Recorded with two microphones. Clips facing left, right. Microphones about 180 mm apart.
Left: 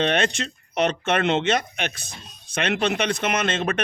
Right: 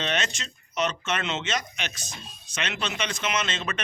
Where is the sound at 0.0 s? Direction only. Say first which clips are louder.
Left 8 dB; 55° left (ahead or behind).